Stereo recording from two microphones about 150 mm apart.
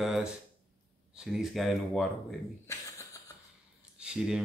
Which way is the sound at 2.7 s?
20° left (ahead or behind).